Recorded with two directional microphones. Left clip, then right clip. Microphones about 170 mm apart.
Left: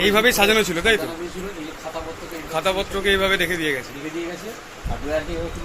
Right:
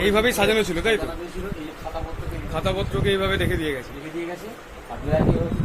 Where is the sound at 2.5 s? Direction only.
5° right (ahead or behind).